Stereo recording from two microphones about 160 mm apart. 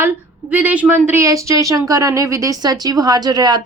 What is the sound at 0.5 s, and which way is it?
Speech, 10° right (ahead or behind).